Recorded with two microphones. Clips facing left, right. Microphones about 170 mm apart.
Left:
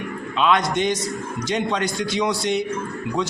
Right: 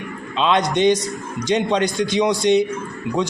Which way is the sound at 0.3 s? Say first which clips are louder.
Right 2 dB; 25° right (ahead or behind).